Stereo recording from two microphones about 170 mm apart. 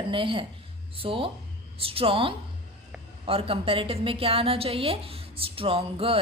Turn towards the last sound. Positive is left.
turn(degrees=-35)  # may be behind; listen again after turning